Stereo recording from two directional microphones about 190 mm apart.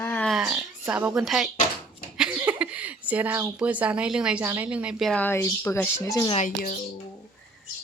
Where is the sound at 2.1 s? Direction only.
5° right (ahead or behind); by 6.3 s 15° left (ahead or behind).